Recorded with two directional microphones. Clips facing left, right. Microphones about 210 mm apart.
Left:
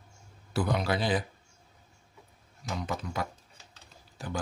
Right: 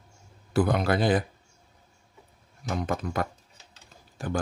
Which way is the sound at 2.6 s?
55° right (ahead or behind).